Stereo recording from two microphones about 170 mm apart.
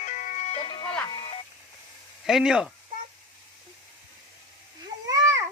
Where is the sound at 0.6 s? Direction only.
30° left (ahead or behind).